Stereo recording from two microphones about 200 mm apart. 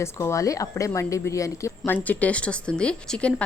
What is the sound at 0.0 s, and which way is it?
A woman's voice, 15° left (ahead or behind).